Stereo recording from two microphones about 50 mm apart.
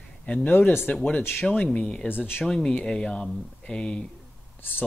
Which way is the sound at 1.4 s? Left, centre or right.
Centre.